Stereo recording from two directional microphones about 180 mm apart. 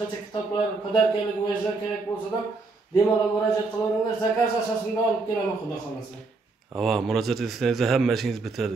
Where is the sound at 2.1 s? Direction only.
25° left (ahead or behind).